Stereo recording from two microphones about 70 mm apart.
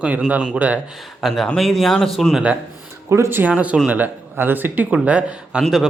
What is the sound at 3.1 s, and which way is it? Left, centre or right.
Speech, right.